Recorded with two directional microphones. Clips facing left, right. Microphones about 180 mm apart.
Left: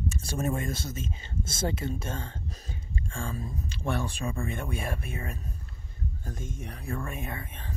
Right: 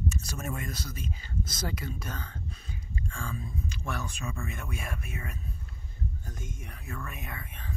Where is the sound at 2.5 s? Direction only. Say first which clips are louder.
Left 2 dB; 40° left (ahead or behind).